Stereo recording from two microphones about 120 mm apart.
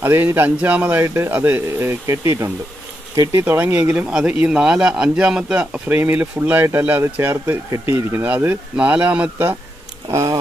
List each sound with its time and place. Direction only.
0.0 s a man's voice: 20° right (ahead or behind)